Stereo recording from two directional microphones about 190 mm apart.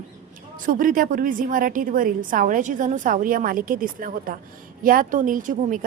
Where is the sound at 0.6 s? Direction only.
45° right (ahead or behind).